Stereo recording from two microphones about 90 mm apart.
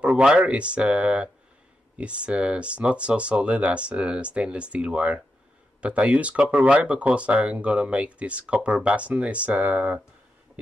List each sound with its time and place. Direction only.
0.0 s speech: 10° right (ahead or behind)